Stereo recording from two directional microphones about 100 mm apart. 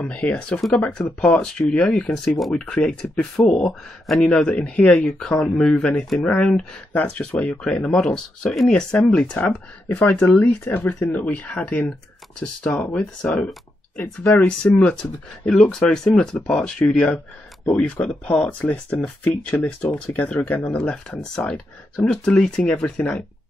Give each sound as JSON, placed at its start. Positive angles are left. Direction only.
{"t": 0.0, "sound": "speech", "side_deg": 10}
{"t": 0.6, "sound": "speech", "side_deg": 0}
{"t": 13.9, "sound": "speech", "side_deg": 20}
{"t": 14.6, "sound": "speech", "side_deg": 10}
{"t": 20.7, "sound": "speech", "side_deg": 5}